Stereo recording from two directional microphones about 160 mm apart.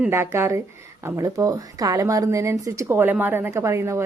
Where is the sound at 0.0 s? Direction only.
15° right (ahead or behind).